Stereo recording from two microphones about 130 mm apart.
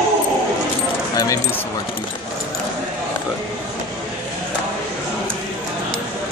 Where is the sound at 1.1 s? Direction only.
25° left (ahead or behind).